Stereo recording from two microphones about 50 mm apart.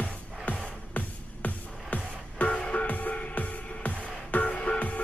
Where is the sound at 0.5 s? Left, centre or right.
Left.